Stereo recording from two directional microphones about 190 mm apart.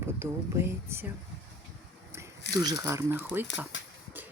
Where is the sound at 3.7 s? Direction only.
75° left (ahead or behind).